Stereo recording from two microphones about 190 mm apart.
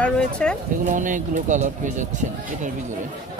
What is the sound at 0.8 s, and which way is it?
Speech, 40° right (ahead or behind).